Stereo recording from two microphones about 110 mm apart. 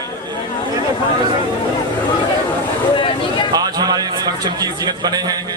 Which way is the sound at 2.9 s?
50° left (ahead or behind).